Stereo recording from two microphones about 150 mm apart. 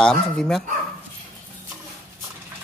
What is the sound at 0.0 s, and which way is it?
Speech, 5° left (ahead or behind).